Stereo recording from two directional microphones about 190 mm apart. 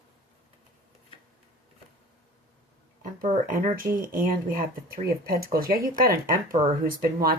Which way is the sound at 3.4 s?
45° right (ahead or behind).